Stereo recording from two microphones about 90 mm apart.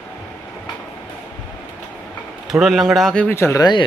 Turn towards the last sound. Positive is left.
turn(degrees=30)  # may be behind; listen again after turning